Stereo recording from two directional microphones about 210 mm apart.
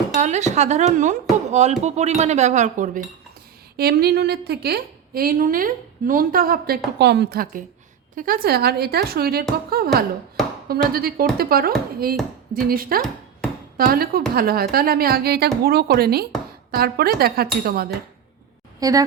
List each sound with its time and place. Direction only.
0.2 s speech: 35° right (ahead or behind)
3.8 s a woman's voice: 50° right (ahead or behind)
18.8 s a woman's voice: 15° right (ahead or behind)